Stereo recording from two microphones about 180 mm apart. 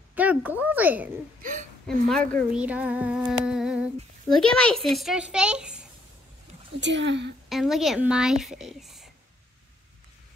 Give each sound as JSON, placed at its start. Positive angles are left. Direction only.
{"t": 0.1, "sound": "speech", "side_deg": -10}
{"t": 1.4, "sound": "speech", "side_deg": -45}
{"t": 1.9, "sound": "female singing", "side_deg": 5}
{"t": 2.5, "sound": "female singing", "side_deg": -10}
{"t": 6.8, "sound": "speech", "side_deg": -85}
{"t": 7.4, "sound": "female singing", "side_deg": 0}